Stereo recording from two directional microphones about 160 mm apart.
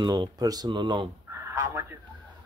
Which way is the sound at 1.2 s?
15° right (ahead or behind).